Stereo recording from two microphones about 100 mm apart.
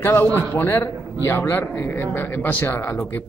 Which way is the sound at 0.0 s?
25° left (ahead or behind).